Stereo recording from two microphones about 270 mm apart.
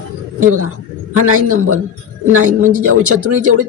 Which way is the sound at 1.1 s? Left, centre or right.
Right.